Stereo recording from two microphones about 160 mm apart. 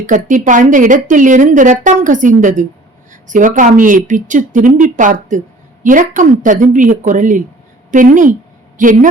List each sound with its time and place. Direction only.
0.0 s a woman's voice: 55° right (ahead or behind)